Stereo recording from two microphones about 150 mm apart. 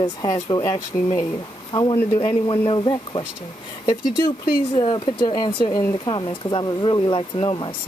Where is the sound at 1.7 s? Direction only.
30° left (ahead or behind).